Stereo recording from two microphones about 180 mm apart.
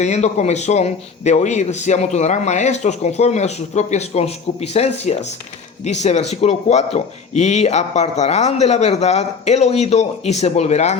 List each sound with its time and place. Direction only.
0.0 s a man's voice: 40° left (ahead or behind)